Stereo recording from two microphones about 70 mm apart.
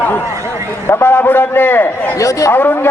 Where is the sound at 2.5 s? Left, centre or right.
Left.